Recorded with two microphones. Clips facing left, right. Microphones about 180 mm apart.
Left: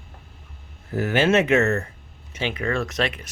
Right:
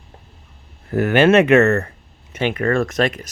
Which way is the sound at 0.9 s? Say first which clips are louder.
Right 6 dB; 65° right (ahead or behind).